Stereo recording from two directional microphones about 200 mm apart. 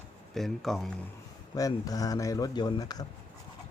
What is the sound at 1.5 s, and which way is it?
Speech, 20° left (ahead or behind).